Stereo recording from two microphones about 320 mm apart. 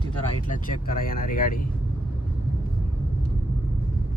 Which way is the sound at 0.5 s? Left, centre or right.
Left.